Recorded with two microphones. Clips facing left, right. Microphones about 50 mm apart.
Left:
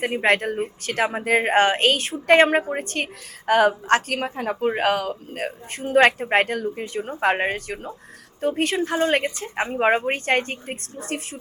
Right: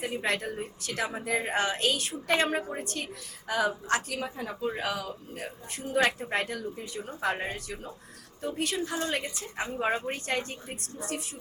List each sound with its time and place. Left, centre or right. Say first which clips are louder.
0.0 s a woman's voice: left 10 dB; left